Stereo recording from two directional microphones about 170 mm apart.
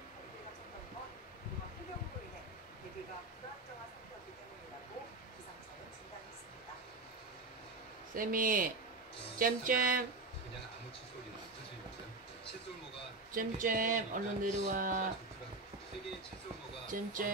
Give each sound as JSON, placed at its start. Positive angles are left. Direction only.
{"t": 8.1, "sound": "speech", "side_deg": -55}
{"t": 13.3, "sound": "speech", "side_deg": -55}
{"t": 16.8, "sound": "speech", "side_deg": -50}